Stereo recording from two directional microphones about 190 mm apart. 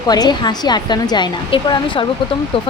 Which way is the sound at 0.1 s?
20° left (ahead or behind).